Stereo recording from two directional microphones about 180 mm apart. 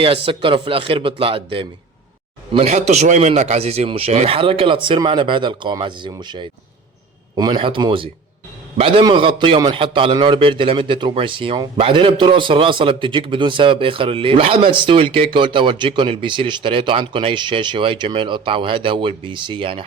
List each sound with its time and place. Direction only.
0.0 s speech: 30° right (ahead or behind)